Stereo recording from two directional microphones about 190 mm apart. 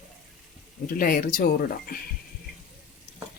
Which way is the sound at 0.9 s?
50° left (ahead or behind).